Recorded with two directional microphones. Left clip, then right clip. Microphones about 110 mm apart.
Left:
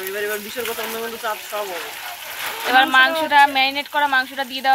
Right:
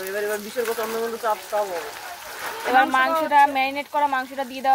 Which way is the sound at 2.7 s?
25° right (ahead or behind).